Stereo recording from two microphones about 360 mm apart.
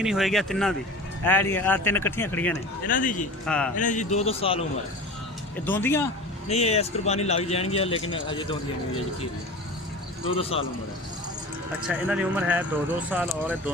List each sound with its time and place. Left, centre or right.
0.0 s speech: centre
2.8 s speech: left
3.4 s speech: centre
3.8 s speech: left
5.6 s speech: centre
6.5 s speech: centre
11.8 s speech: centre